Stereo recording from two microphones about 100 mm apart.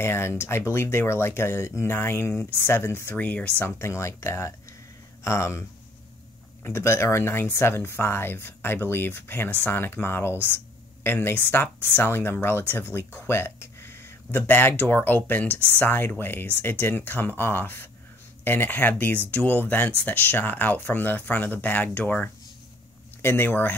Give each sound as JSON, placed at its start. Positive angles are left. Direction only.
{"t": 0.0, "sound": "speech", "side_deg": 25}
{"t": 3.6, "sound": "speech", "side_deg": 25}
{"t": 6.6, "sound": "speech", "side_deg": 25}